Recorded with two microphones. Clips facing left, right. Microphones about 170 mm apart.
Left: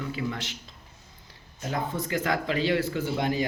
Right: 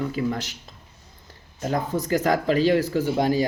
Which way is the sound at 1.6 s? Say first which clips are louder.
Right 5 dB; 40° right (ahead or behind).